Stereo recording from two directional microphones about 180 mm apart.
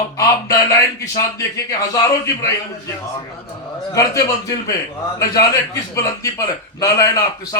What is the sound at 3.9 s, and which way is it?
A man's voice, 20° left (ahead or behind).